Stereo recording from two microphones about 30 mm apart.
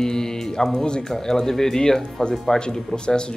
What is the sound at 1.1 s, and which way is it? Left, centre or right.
Speech, centre.